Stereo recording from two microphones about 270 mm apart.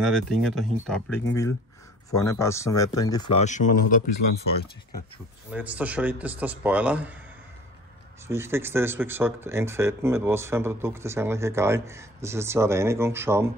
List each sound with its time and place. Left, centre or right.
0.0 s a man's voice: centre; by 4.1 s left
5.5 s a man's voice: centre
8.3 s speech: centre